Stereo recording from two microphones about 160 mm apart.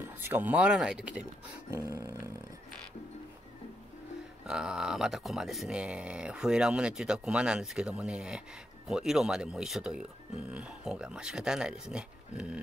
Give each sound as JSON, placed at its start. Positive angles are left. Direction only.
{"t": 0.0, "sound": "speech", "side_deg": -15}
{"t": 1.8, "sound": "a sound", "side_deg": -20}
{"t": 4.5, "sound": "speech", "side_deg": -5}